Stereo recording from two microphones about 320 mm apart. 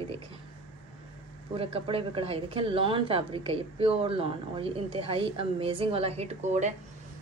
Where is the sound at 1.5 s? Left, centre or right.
Centre.